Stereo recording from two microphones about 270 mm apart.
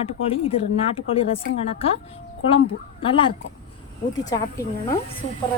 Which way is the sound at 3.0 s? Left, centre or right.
Centre.